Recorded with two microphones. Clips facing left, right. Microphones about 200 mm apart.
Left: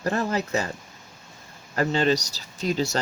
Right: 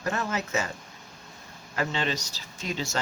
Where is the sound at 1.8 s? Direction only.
40° left (ahead or behind).